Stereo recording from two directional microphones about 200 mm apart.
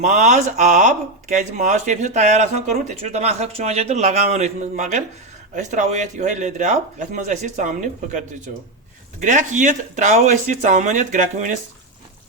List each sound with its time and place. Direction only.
0.0 s speech: 40° right (ahead or behind)
9.2 s speech: 40° right (ahead or behind)